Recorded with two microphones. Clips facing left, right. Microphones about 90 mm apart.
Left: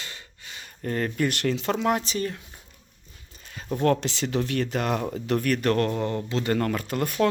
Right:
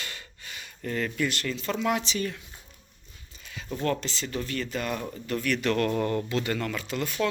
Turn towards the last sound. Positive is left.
turn(degrees=50)  # may be behind; listen again after turning